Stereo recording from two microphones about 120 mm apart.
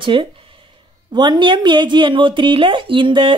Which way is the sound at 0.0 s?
45° right (ahead or behind).